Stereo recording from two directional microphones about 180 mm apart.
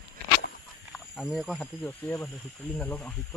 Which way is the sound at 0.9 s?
Centre (ahead or behind).